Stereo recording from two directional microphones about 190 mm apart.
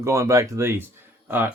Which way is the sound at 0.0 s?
15° right (ahead or behind).